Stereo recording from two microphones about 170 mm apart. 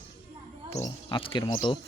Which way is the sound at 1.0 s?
30° left (ahead or behind).